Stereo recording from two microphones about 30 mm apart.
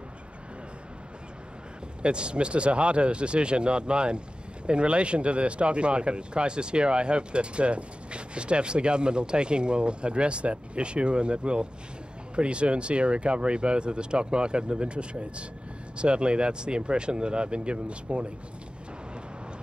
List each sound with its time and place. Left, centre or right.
2.0 s speech: right